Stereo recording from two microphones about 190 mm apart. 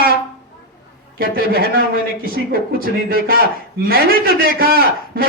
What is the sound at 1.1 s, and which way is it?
A man's voice, 50° right (ahead or behind).